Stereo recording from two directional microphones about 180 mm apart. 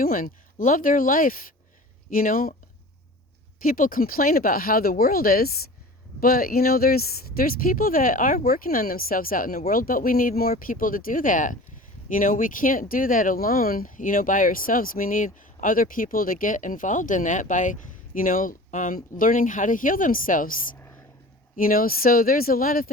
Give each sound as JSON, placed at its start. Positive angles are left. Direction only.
{"t": 0.0, "sound": "speech", "side_deg": 50}
{"t": 3.6, "sound": "speech", "side_deg": 50}